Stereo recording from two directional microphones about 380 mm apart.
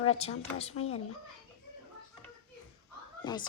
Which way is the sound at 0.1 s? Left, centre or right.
Centre.